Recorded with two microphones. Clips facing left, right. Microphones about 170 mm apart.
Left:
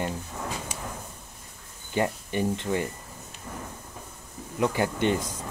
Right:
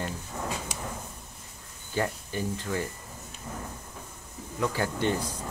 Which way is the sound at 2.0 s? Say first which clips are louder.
Left 4 dB; 20° left (ahead or behind).